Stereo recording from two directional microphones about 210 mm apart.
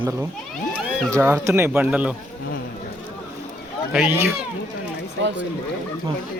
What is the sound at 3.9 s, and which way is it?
Speech, 10° right (ahead or behind).